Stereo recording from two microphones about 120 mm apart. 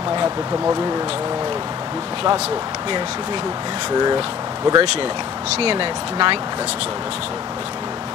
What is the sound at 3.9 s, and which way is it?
Speech, 35° right (ahead or behind).